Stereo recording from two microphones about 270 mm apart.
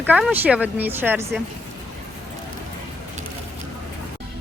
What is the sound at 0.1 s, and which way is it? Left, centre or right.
Speech, centre.